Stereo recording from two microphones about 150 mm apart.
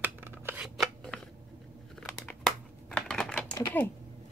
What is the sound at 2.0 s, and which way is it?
Crumpling, 5° left (ahead or behind).